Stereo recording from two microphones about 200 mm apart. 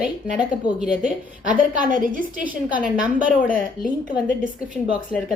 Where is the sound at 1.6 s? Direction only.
40° right (ahead or behind).